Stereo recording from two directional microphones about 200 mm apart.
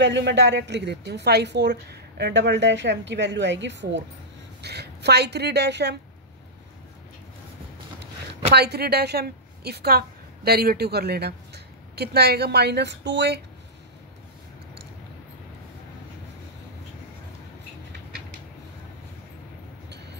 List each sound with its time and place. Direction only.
0.0 s a woman's voice: 60° right (ahead or behind)
8.0 s a woman's voice: 60° right (ahead or behind)